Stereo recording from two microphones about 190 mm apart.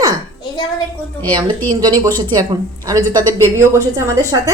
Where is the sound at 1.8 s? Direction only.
20° right (ahead or behind).